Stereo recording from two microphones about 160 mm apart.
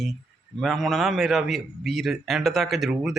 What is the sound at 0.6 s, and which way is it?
A man's voice, centre (ahead or behind).